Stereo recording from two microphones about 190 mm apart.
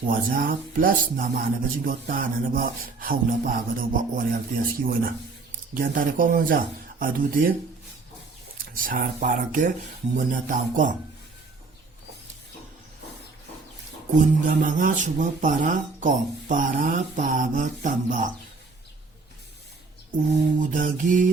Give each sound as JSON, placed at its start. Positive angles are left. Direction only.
{"t": 0.1, "sound": "speech", "side_deg": -50}
{"t": 8.7, "sound": "speech", "side_deg": -45}
{"t": 14.2, "sound": "speech", "side_deg": -45}
{"t": 20.6, "sound": "speech", "side_deg": -45}